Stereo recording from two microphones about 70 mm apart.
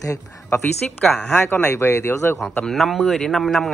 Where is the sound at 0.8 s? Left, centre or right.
Centre.